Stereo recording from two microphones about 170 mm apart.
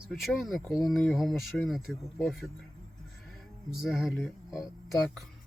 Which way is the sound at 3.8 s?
Centre (ahead or behind).